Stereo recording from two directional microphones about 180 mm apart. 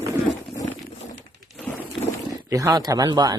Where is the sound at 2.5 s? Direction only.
20° right (ahead or behind).